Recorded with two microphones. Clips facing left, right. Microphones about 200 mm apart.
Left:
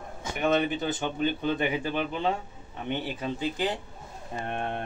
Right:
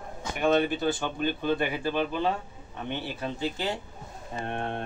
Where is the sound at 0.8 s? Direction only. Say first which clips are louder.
Even; 20° left (ahead or behind).